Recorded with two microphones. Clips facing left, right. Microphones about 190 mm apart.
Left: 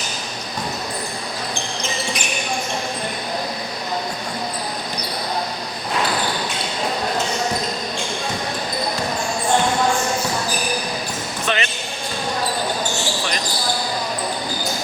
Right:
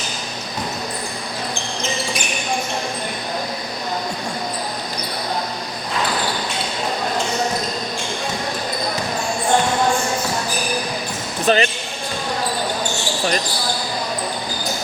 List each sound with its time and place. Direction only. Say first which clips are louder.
11.4 s basketball bounce: right 7 dB; 35° right (ahead or behind)